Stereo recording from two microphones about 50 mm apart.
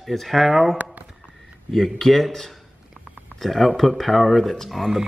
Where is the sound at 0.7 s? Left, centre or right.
Right.